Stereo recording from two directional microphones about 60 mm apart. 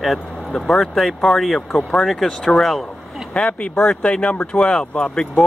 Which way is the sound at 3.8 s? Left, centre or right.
Centre.